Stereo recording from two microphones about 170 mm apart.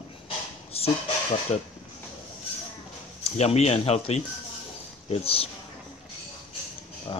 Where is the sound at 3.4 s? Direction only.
40° left (ahead or behind).